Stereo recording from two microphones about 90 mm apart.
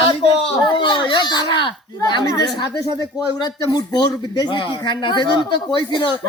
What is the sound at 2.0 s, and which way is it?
A woman's voice, 45° left (ahead or behind).